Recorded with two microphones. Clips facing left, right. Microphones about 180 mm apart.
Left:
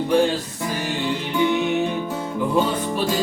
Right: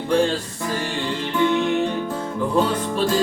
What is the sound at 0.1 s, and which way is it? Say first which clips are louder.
Music: right 1 dB; 5° left (ahead or behind).